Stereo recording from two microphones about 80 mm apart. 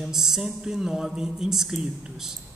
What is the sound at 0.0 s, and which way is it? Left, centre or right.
Speech, centre.